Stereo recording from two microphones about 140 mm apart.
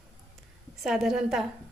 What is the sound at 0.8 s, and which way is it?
Speech, 5° right (ahead or behind).